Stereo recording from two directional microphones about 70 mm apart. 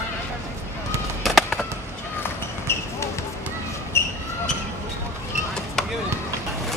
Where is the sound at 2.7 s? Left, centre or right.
Left.